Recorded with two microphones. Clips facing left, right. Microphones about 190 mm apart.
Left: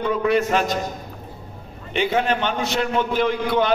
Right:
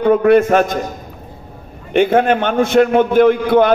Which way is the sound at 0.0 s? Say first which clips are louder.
Right 9 dB; 55° right (ahead or behind).